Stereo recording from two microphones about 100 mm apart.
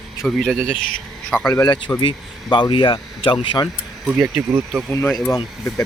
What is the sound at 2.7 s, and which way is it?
Speech, 65° left (ahead or behind).